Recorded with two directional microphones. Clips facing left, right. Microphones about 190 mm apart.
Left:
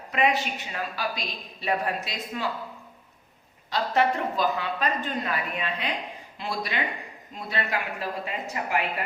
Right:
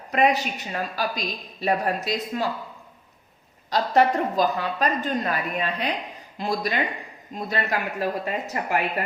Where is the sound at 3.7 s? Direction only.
40° right (ahead or behind).